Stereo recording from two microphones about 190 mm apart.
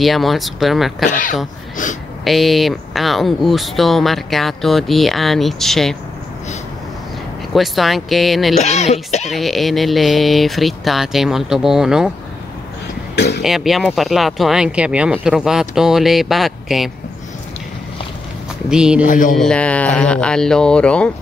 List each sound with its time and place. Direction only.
0.0 s speech: centre (ahead or behind)
2.2 s speech: centre (ahead or behind)
7.5 s speech: centre (ahead or behind)
8.5 s speech: 35° left (ahead or behind)
9.3 s speech: centre (ahead or behind)
13.1 s speech: 60° left (ahead or behind)
13.4 s speech: centre (ahead or behind)
18.7 s speech: 5° right (ahead or behind)
19.0 s speech: 45° left (ahead or behind)
19.3 s speech: 5° left (ahead or behind)